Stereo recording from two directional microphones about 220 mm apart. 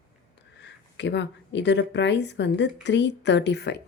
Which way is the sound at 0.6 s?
50° left (ahead or behind).